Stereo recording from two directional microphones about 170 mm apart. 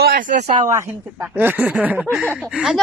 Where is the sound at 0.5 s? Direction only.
20° right (ahead or behind); by 2.8 s 5° right (ahead or behind).